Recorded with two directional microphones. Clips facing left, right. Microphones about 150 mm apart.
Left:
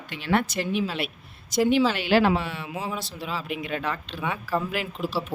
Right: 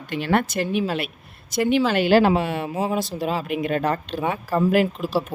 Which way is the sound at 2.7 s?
35° right (ahead or behind).